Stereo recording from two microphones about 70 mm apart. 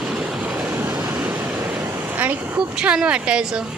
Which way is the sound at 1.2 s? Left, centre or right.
Right.